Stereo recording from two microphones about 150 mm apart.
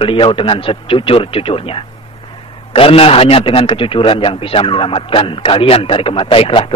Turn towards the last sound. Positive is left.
turn(degrees=40)  # may be behind; listen again after turning